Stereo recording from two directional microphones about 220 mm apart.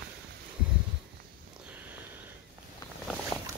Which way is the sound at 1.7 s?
5° right (ahead or behind).